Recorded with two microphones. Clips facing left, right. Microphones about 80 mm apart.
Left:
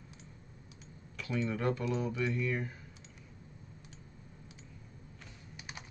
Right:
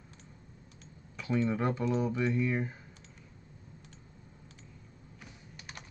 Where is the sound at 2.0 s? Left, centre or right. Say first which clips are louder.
Right 4 dB; right.